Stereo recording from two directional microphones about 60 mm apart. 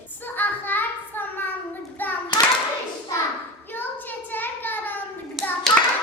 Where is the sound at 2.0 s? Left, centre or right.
Left.